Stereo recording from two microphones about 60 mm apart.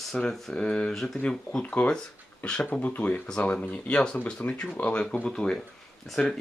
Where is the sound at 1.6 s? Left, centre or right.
Left.